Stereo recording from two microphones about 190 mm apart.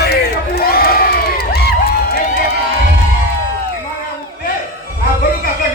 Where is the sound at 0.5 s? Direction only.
55° left (ahead or behind).